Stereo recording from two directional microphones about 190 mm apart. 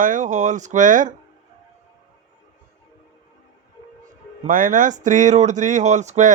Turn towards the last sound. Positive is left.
turn(degrees=-40)  # may be behind; listen again after turning